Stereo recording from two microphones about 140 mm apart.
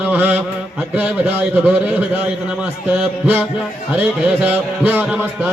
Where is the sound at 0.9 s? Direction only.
10° right (ahead or behind).